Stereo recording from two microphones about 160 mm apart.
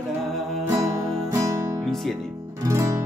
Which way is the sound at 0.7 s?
20° right (ahead or behind).